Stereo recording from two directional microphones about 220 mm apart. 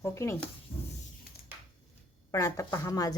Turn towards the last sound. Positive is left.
turn(degrees=15)  # may be behind; listen again after turning